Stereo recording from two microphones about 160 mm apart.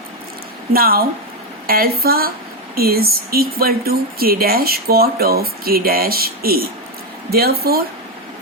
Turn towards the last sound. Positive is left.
turn(degrees=-75)  # may be behind; listen again after turning